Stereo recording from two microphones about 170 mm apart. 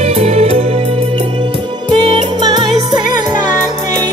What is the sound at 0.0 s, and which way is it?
Music, 40° right (ahead or behind).